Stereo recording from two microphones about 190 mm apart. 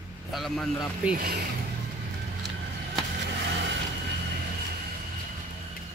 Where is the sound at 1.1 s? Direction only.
55° right (ahead or behind).